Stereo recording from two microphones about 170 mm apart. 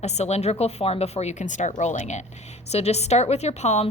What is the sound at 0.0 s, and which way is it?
A woman's voice, 40° left (ahead or behind).